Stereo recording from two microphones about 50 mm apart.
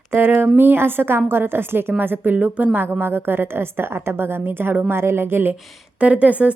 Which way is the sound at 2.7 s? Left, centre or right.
Right.